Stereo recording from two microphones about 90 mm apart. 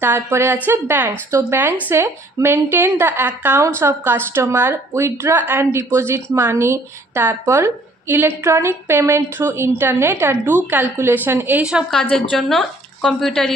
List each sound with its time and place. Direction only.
0.0 s a woman's voice: 25° right (ahead or behind)
11.9 s a woman's voice: 10° left (ahead or behind)